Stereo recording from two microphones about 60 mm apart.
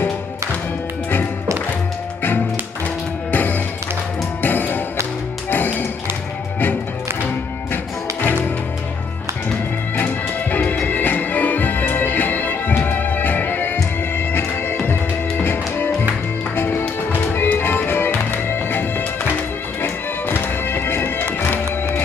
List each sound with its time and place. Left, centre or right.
3.3 s music: left
10.5 s music: left